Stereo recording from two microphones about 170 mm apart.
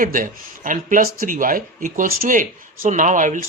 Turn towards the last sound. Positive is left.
turn(degrees=-50)  # may be behind; listen again after turning